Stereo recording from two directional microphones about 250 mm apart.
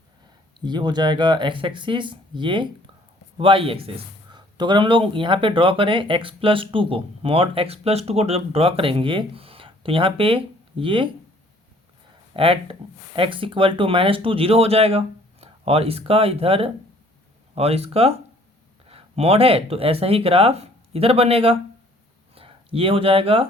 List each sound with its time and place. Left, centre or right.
0.6 s speech: centre
12.3 s speech: right